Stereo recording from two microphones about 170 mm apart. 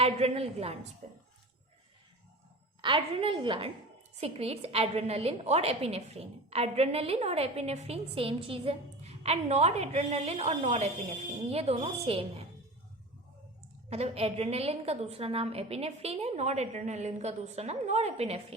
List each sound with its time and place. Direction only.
0.0 s a woman's voice: 35° right (ahead or behind)
2.8 s a woman's voice: 30° right (ahead or behind)
13.9 s a woman's voice: 35° right (ahead or behind)